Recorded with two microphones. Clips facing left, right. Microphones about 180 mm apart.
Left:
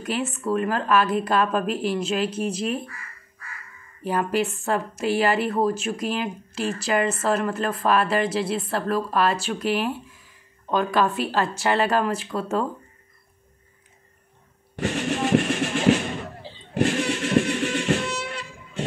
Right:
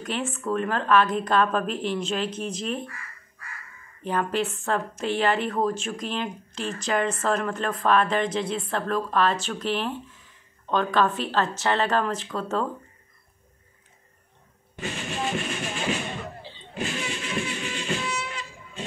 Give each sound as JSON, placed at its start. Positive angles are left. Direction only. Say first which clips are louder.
{"t": 0.0, "sound": "speech", "louder": "left 3 dB", "side_deg": 5}
{"t": 4.0, "sound": "speech", "louder": "left 2 dB", "side_deg": 10}
{"t": 14.8, "sound": "a sound", "louder": "left 7 dB", "side_deg": 70}
{"t": 16.7, "sound": "music", "louder": "left 9 dB", "side_deg": 75}